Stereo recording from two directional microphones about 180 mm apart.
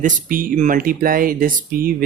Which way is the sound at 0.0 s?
50° right (ahead or behind).